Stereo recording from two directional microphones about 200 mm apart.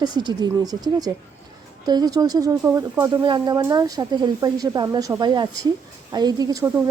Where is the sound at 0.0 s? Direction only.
20° right (ahead or behind).